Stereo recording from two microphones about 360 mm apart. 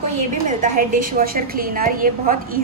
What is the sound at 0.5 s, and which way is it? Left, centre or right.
A woman's voice, right.